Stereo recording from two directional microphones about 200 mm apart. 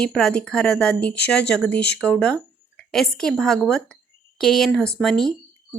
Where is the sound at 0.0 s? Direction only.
5° left (ahead or behind).